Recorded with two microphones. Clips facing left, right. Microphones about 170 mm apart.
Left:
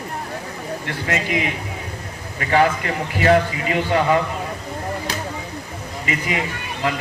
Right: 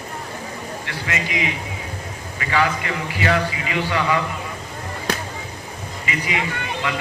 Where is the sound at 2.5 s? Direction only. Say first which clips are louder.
Left 4 dB; 45° left (ahead or behind).